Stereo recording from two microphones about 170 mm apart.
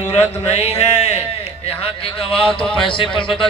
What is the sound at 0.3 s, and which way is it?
Speech, 35° left (ahead or behind).